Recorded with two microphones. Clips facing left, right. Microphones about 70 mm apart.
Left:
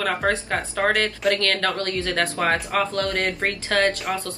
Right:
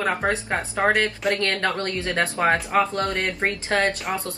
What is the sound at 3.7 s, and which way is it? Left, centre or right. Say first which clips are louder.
Speech: left 2 dB; right.